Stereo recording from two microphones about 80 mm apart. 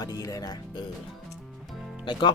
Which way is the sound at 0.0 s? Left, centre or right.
Left.